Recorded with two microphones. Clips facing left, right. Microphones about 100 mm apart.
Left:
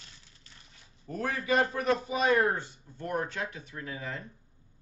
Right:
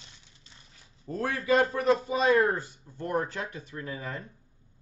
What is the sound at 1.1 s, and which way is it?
A man's voice, 30° right (ahead or behind).